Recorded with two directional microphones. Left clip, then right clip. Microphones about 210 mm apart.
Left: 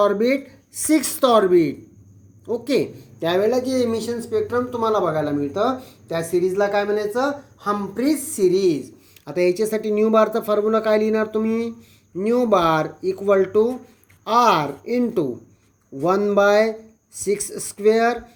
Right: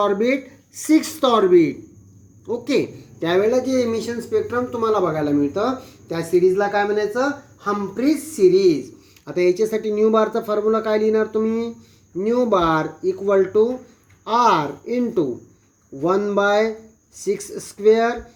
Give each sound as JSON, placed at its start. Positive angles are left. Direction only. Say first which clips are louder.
{"t": 0.0, "sound": "speech", "louder": "left 1 dB", "side_deg": 25}